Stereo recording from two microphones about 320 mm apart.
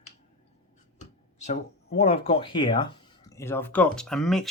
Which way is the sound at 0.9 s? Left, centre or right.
Left.